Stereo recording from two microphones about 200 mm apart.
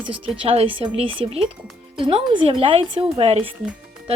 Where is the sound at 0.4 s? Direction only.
25° right (ahead or behind).